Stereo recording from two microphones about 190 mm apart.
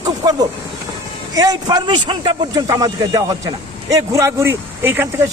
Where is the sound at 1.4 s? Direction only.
20° right (ahead or behind).